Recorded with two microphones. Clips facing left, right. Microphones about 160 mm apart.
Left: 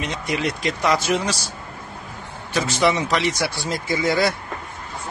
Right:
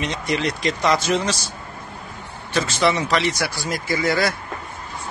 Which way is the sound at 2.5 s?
15° left (ahead or behind).